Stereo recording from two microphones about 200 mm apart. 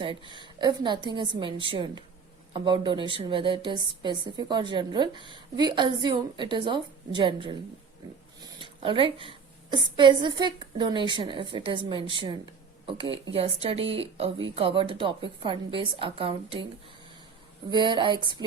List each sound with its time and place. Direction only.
0.0 s a woman's voice: 25° right (ahead or behind)
17.7 s a woman's voice: 25° right (ahead or behind)